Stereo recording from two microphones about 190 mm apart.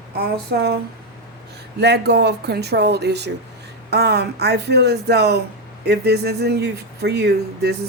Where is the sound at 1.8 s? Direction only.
60° right (ahead or behind).